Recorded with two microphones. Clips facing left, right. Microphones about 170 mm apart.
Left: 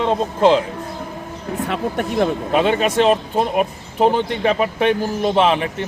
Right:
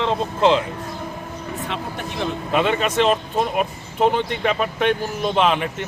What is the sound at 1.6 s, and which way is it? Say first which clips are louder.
Speech: left 10 dB; 55° left (ahead or behind).